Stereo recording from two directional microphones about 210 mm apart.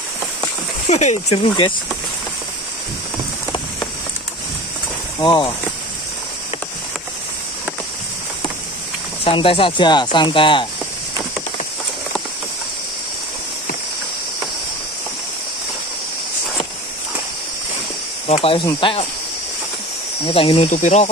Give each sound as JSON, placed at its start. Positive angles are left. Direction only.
{"t": 0.8, "sound": "speech", "side_deg": 35}
{"t": 5.2, "sound": "speech", "side_deg": 20}
{"t": 9.2, "sound": "speech", "side_deg": 25}
{"t": 18.2, "sound": "speech", "side_deg": 30}
{"t": 20.2, "sound": "speech", "side_deg": 25}